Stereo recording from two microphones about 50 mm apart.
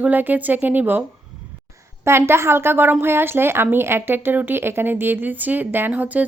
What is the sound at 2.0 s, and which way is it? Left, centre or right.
A woman's voice, right.